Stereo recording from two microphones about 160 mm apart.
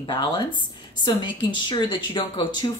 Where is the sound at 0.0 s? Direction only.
30° left (ahead or behind).